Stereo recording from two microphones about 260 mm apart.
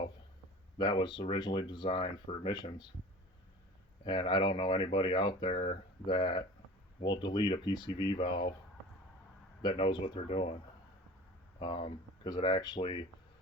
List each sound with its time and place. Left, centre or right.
0.8 s speech: centre
4.0 s speech: centre
9.6 s speech: centre
11.6 s speech: centre